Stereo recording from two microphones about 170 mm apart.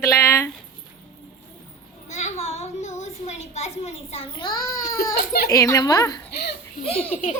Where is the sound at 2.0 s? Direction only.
40° left (ahead or behind).